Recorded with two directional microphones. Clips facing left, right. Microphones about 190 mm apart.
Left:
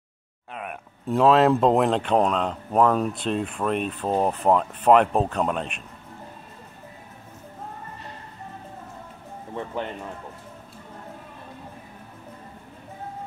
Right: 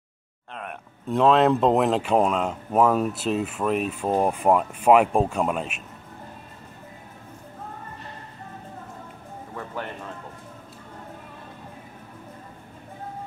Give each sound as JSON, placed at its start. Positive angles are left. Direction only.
{"t": 0.5, "sound": "speech", "side_deg": 5}
{"t": 9.6, "sound": "speech", "side_deg": 20}